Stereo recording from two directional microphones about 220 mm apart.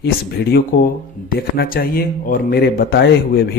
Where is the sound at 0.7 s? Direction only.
45° left (ahead or behind).